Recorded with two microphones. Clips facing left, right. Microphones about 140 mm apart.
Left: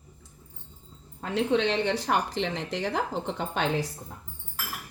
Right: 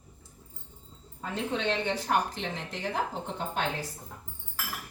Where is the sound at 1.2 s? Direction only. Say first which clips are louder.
Left 6 dB; 75° left (ahead or behind).